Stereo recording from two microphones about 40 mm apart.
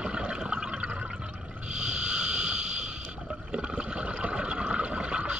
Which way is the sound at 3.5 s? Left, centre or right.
Right.